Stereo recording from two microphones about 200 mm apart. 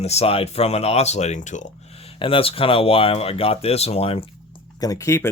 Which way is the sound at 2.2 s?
25° left (ahead or behind).